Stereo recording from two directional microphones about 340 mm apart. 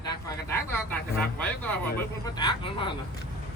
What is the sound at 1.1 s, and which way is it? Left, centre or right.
Speech, centre.